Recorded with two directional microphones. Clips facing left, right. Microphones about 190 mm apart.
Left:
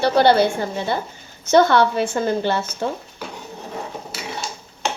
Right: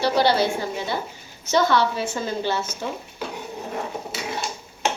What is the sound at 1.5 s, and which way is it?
A woman's voice, 60° left (ahead or behind).